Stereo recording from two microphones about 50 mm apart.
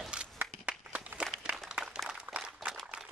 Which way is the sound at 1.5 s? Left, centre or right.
Centre.